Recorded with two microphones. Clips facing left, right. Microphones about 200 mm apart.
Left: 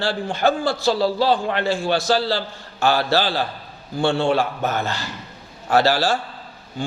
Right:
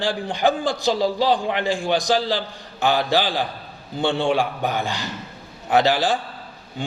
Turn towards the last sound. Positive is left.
turn(degrees=-15)  # may be behind; listen again after turning